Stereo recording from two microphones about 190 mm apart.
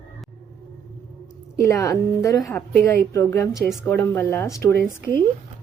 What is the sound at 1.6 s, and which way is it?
Speech, 15° left (ahead or behind).